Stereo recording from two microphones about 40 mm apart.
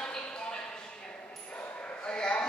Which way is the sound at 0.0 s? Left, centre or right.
Centre.